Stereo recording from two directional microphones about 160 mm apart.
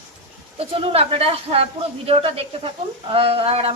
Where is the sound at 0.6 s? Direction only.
35° right (ahead or behind).